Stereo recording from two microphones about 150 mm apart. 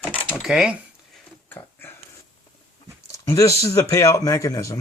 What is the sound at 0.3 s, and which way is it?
Speech, 5° right (ahead or behind).